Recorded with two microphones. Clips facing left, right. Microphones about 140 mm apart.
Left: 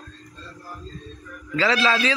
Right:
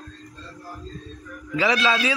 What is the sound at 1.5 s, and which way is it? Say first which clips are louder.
Speech: even; 15° right (ahead or behind).